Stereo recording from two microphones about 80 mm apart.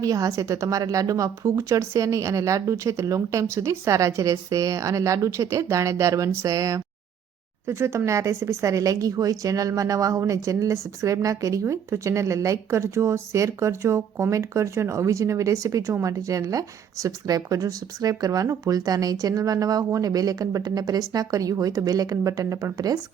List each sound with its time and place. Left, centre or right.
0.0 s a woman's voice: right
7.7 s a woman's voice: right